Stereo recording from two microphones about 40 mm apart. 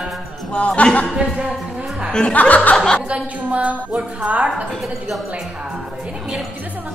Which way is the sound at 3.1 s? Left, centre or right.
Right.